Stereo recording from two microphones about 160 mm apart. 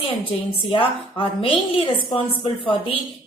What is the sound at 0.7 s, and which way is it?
A woman's voice, 35° left (ahead or behind).